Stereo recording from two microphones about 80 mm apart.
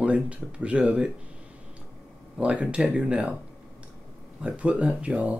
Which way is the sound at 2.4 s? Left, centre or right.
Centre.